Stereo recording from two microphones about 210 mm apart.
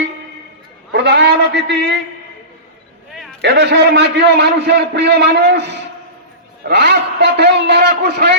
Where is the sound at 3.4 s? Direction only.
55° right (ahead or behind).